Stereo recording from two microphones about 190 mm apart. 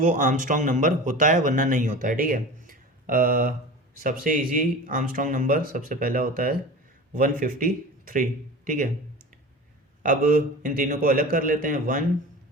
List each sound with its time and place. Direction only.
0.0 s speech: 40° right (ahead or behind)
10.0 s speech: 45° right (ahead or behind)